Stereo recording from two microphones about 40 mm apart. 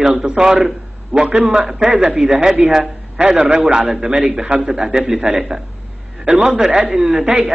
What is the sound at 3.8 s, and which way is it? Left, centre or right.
A man's voice, centre.